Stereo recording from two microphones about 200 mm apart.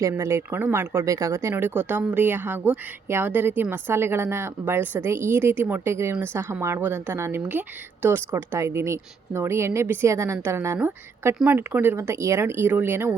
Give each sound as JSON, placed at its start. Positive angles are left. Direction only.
{"t": 0.0, "sound": "speech", "side_deg": -15}